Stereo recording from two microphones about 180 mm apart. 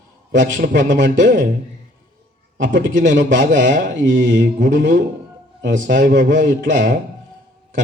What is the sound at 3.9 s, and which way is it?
Speech, 90° right.